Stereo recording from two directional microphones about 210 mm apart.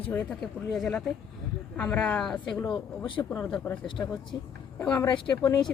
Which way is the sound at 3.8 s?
25° left (ahead or behind).